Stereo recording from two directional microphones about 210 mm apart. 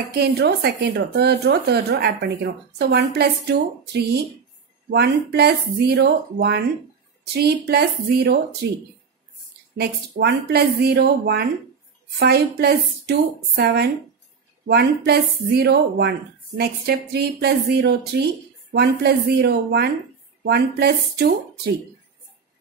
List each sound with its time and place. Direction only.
0.1 s speech: 50° right (ahead or behind)